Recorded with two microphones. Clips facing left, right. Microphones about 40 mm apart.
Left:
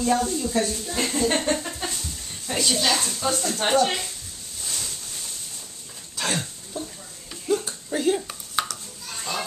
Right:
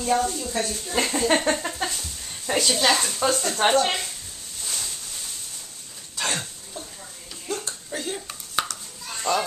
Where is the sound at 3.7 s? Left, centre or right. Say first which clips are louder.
Even; right.